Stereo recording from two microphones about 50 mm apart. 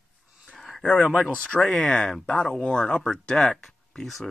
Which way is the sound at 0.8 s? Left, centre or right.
Left.